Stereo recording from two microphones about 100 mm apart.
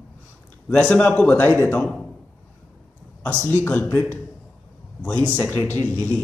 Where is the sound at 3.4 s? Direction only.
15° left (ahead or behind).